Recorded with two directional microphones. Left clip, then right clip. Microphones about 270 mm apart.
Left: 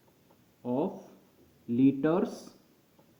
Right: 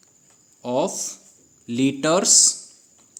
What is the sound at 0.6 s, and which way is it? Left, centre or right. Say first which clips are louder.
Speech: right 10 dB; right.